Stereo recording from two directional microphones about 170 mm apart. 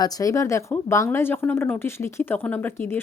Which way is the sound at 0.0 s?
20° left (ahead or behind).